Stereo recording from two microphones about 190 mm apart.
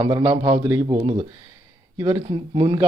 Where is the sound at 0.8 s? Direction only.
25° right (ahead or behind).